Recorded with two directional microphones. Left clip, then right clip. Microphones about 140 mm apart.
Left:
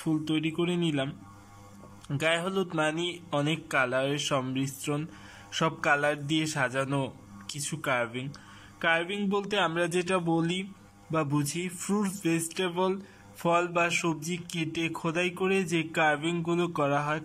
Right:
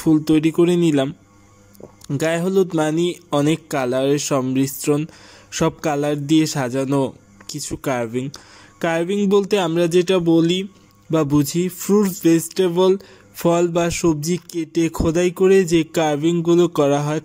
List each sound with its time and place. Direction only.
0.0 s speech: 40° right (ahead or behind)
2.1 s speech: 40° right (ahead or behind)